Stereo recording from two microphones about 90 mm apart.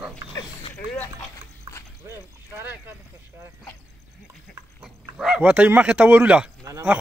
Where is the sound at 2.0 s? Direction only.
30° right (ahead or behind).